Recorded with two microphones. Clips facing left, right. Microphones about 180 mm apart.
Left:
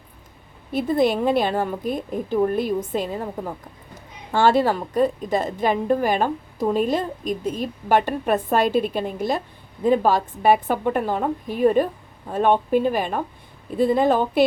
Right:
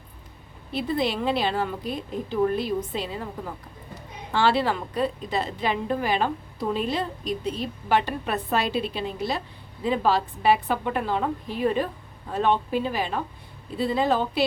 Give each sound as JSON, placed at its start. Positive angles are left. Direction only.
{"t": 0.7, "sound": "a woman's voice", "side_deg": 50}
{"t": 4.3, "sound": "a woman's voice", "side_deg": 45}